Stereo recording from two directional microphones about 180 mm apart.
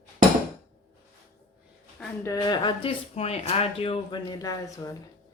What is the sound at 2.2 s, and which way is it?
Speech, 20° left (ahead or behind).